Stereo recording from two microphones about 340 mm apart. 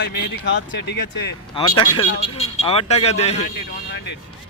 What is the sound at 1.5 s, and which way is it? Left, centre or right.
Speech, centre.